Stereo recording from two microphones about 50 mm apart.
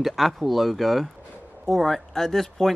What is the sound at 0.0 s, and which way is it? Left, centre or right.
Speech, centre.